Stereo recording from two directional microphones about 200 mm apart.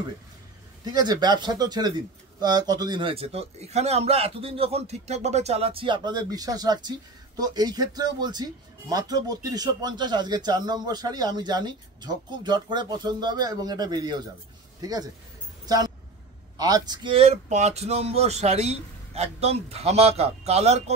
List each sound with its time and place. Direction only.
0.8 s a man's voice: 20° right (ahead or behind)
15.6 s a sound: 20° right (ahead or behind)
16.5 s speech: 20° right (ahead or behind)